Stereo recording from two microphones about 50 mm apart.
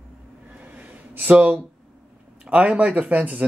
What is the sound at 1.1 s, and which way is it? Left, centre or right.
Speech, right.